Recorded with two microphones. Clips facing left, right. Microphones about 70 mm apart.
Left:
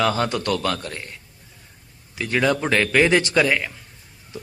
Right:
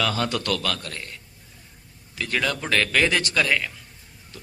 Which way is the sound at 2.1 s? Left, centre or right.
Centre.